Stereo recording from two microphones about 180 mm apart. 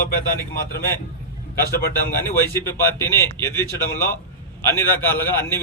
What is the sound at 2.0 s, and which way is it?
A man's voice, 15° left (ahead or behind).